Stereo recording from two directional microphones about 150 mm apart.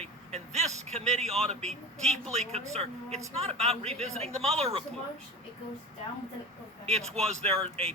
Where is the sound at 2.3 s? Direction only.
45° right (ahead or behind).